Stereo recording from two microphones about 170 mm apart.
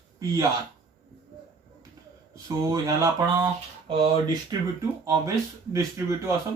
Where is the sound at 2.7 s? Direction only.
20° right (ahead or behind).